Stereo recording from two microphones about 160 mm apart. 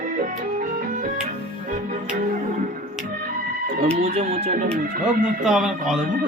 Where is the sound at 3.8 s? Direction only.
40° right (ahead or behind).